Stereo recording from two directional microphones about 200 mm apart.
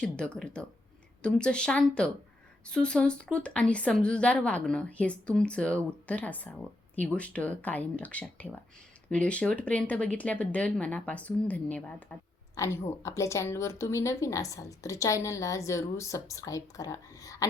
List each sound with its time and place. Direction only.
0.0 s a woman's voice: 5° left (ahead or behind)